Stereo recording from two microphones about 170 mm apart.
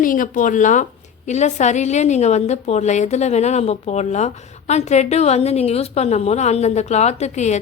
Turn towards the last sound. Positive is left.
turn(degrees=40)  # may be behind; listen again after turning